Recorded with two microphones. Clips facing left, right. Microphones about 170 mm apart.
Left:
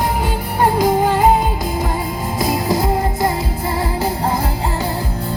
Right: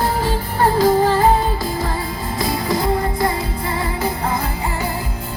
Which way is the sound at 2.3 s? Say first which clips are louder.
Left 2 dB; 25° left (ahead or behind).